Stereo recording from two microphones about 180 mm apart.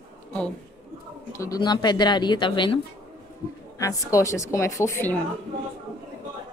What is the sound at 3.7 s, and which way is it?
Speech, 15° left (ahead or behind).